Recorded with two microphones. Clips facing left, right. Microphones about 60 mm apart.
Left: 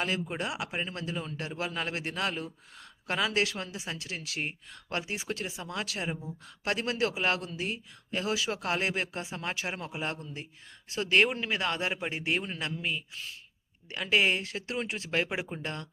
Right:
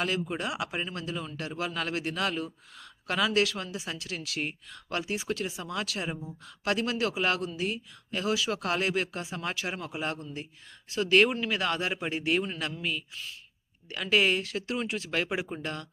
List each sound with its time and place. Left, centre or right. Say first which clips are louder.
0.0 s speech: right 1 dB; centre
15.3 s speech: right 2 dB; centre
15.6 s speech: right 1 dB; left